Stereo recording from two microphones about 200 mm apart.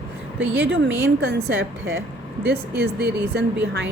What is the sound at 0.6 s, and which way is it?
A woman's voice, 60° right (ahead or behind).